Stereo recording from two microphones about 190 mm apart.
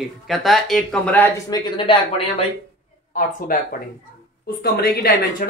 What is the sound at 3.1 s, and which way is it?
Speech, 45° left (ahead or behind).